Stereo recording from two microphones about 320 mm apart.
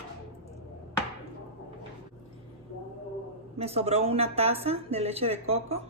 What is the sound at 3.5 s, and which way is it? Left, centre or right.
Speech, centre.